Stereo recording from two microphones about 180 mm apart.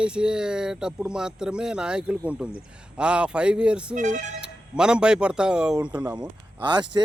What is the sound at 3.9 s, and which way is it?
Speech, 45° right (ahead or behind).